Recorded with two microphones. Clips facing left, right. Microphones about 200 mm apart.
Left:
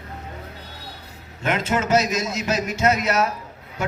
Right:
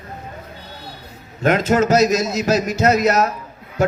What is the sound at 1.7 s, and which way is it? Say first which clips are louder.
Speech: right 5 dB; 40° right (ahead or behind).